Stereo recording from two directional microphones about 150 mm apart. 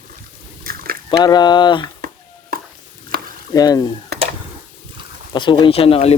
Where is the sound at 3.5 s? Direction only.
25° left (ahead or behind).